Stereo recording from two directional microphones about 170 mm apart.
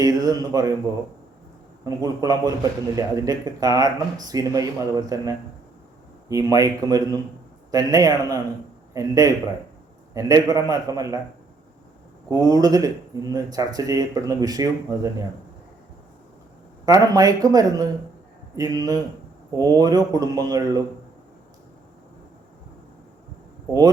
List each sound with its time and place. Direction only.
0.0 s speech: 20° right (ahead or behind)
1.8 s speech: 20° right (ahead or behind)
12.3 s speech: 20° right (ahead or behind)
16.8 s speech: 20° right (ahead or behind)